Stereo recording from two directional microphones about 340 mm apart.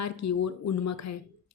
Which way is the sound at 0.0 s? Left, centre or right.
Left.